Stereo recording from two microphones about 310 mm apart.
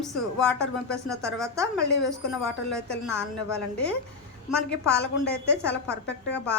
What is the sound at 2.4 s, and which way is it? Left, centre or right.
Speech, centre.